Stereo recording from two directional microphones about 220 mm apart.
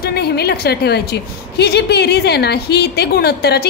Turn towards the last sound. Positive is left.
turn(degrees=45)  # may be behind; listen again after turning